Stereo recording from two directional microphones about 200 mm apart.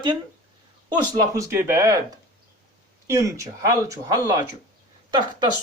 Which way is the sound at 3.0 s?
15° right (ahead or behind).